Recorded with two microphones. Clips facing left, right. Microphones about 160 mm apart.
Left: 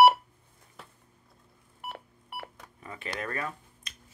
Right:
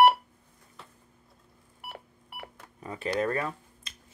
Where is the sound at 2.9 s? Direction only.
35° right (ahead or behind).